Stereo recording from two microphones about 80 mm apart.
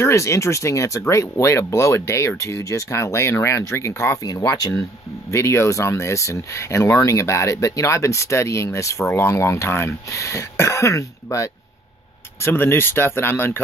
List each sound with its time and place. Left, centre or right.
0.0 s speech: left
4.2 s speech: left
5.3 s speech: left